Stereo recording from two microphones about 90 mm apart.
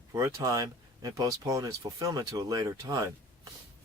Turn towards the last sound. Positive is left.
turn(degrees=-45)  # may be behind; listen again after turning